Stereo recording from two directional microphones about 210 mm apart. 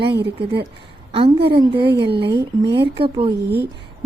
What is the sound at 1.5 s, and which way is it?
Speech, 20° right (ahead or behind).